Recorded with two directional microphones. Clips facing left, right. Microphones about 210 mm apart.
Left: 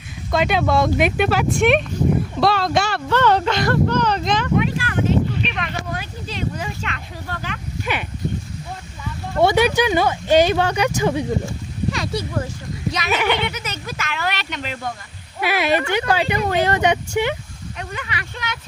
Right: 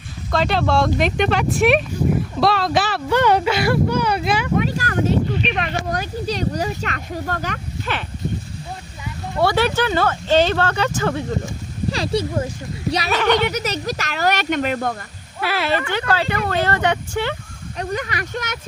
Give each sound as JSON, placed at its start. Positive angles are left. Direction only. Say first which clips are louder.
{"t": 0.4, "sound": "speech", "louder": "even", "side_deg": 0}
{"t": 3.1, "sound": "speech", "louder": "right 1 dB", "side_deg": -10}
{"t": 4.5, "sound": "a sound", "louder": "even", "side_deg": -40}
{"t": 5.5, "sound": "speech", "louder": "right 4 dB", "side_deg": -40}
{"t": 9.4, "sound": "speech", "louder": "left 2 dB", "side_deg": 20}
{"t": 11.9, "sound": "a child's voice", "louder": "right 5 dB", "side_deg": -30}
{"t": 13.1, "sound": "speech", "louder": "right 2 dB", "side_deg": 10}
{"t": 13.4, "sound": "speech", "louder": "right 5 dB", "side_deg": -40}
{"t": 15.4, "sound": "speech", "louder": "left 2 dB", "side_deg": 15}
{"t": 17.7, "sound": "speech", "louder": "right 7 dB", "side_deg": -40}